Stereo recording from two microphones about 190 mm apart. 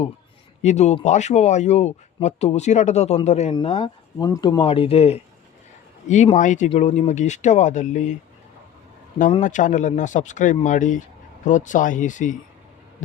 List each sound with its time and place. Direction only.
0.6 s speech: 35° left (ahead or behind)
9.1 s speech: 40° left (ahead or behind)